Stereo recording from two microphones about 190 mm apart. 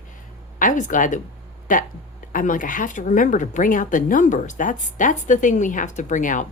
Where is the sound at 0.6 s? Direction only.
45° left (ahead or behind).